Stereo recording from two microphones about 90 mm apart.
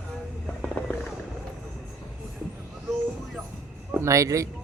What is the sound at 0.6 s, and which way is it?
Fireworks, 10° left (ahead or behind).